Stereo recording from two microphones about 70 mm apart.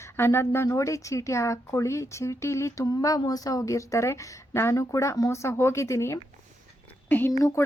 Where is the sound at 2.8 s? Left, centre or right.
Left.